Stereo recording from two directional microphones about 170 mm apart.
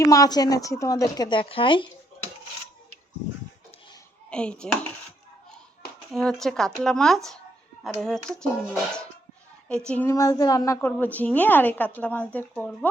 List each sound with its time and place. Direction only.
0.0 s a woman's voice: 20° left (ahead or behind)
4.3 s speech: 5° left (ahead or behind)
6.1 s a woman's voice: 5° left (ahead or behind)